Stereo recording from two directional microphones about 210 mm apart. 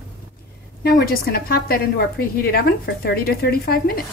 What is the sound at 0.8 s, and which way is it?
A woman's voice, 45° left (ahead or behind).